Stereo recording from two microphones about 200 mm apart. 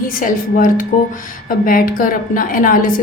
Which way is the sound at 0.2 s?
40° left (ahead or behind).